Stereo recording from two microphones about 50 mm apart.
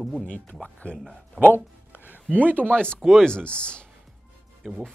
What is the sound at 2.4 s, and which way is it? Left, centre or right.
Speech, right.